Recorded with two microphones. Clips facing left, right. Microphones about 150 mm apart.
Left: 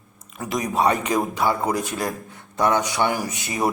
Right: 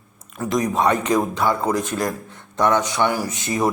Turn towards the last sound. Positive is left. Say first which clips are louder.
# right 3 dB
turn(degrees=10)  # may be behind; listen again after turning